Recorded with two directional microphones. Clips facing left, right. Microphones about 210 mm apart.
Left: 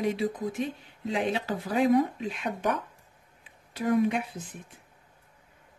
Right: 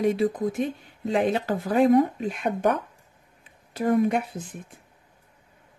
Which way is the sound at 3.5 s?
50° right (ahead or behind).